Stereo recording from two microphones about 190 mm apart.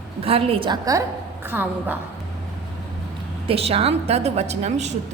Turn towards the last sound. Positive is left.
turn(degrees=-35)  # may be behind; listen again after turning